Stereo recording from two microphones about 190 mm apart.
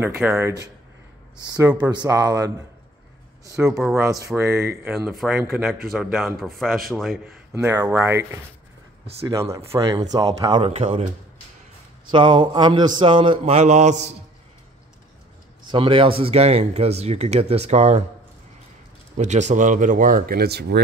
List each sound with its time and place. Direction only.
0.0 s speech: 10° right (ahead or behind)
1.9 s speech: 20° right (ahead or behind)
6.1 s speech: centre (ahead or behind)
7.5 s speech: 15° right (ahead or behind); by 11.1 s 30° right (ahead or behind)
12.1 s speech: 25° right (ahead or behind)
15.6 s speech: 25° right (ahead or behind)
19.1 s speech: 40° right (ahead or behind); by 20.8 s 60° right (ahead or behind)